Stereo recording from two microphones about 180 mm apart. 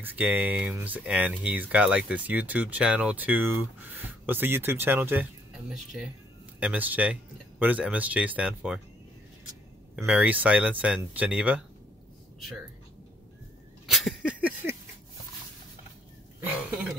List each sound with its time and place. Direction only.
0.0 s speech: 10° right (ahead or behind)
10.0 s speech: 10° right (ahead or behind)
13.8 s a sound: centre (ahead or behind)